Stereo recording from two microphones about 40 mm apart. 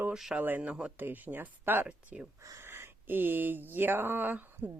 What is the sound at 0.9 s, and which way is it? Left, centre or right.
Speech, right.